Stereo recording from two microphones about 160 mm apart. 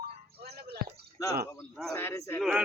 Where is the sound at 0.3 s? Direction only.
80° right.